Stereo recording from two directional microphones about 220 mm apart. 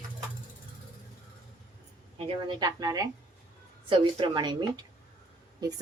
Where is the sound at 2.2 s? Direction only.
20° right (ahead or behind).